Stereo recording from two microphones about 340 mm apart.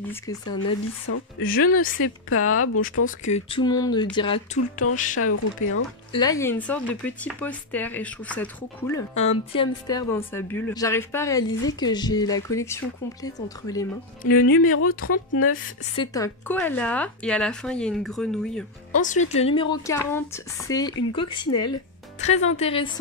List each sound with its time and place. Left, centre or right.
0.1 s speech: centre
0.6 s speech: left
3.3 s speech: centre
5.2 s speech: left
6.1 s speech: centre
9.1 s speech: centre
14.2 s speech: left
16.0 s speech: centre
18.9 s speech: left